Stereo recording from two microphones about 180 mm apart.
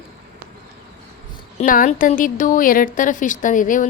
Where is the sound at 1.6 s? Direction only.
50° left (ahead or behind).